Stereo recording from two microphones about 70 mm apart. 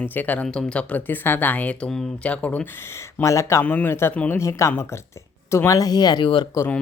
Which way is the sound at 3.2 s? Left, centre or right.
Left.